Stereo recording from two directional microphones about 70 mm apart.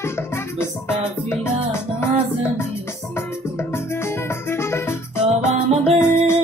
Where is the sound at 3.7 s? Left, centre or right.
Left.